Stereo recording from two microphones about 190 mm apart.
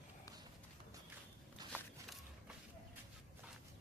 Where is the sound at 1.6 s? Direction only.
20° right (ahead or behind).